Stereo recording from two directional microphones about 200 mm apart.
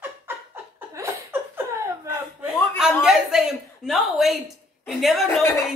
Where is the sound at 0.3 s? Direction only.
10° right (ahead or behind).